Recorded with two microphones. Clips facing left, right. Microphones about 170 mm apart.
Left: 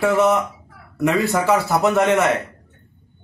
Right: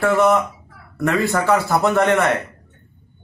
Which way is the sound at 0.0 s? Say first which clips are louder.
Right 1 dB; 5° left (ahead or behind).